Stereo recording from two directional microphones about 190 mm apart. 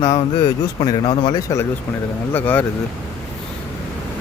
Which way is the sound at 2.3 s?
10° left (ahead or behind).